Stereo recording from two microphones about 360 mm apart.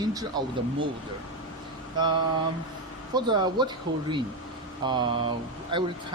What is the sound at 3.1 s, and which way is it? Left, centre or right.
Speech, centre.